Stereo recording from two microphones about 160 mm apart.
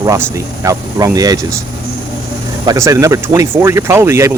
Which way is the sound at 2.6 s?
20° right (ahead or behind).